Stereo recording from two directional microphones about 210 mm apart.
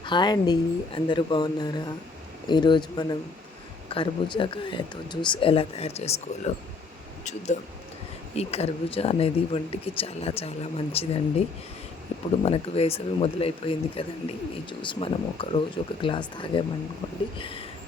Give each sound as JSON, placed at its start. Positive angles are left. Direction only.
{"t": 0.0, "sound": "speech", "side_deg": 20}
{"t": 12.3, "sound": "speech", "side_deg": 30}